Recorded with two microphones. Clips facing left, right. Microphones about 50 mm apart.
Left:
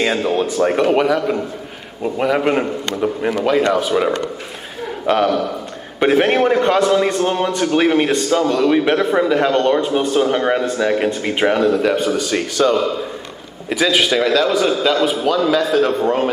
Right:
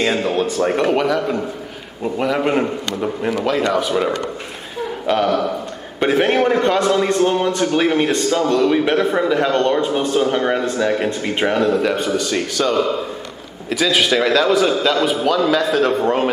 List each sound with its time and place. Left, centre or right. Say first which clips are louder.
0.0 s a man's voice: left 1 dB; centre